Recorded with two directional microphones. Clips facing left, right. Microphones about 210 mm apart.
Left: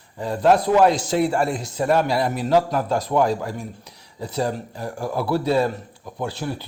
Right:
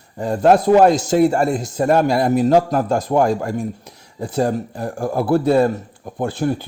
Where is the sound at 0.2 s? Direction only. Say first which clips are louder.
Right 4 dB; 45° right (ahead or behind).